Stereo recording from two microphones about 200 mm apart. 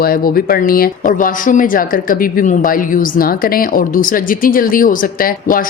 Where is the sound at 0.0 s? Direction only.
50° left (ahead or behind).